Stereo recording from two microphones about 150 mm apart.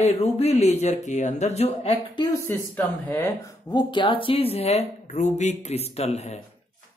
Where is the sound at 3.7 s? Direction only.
30° left (ahead or behind); by 6.4 s 45° left (ahead or behind).